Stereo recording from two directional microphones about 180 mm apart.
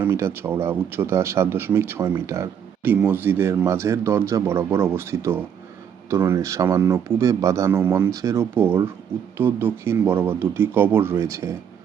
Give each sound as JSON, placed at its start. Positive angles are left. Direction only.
{"t": 0.0, "sound": "a man's voice", "side_deg": -15}